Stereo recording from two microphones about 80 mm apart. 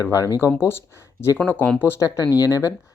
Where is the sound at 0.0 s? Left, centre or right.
Left.